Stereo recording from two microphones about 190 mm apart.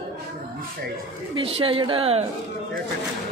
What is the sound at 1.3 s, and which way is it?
Speech, 30° right (ahead or behind).